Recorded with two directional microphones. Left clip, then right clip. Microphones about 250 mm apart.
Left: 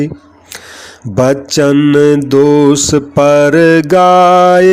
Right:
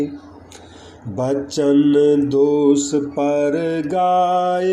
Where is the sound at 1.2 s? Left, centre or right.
Left.